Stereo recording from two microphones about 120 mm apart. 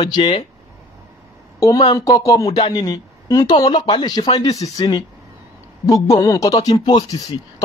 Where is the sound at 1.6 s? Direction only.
30° left (ahead or behind).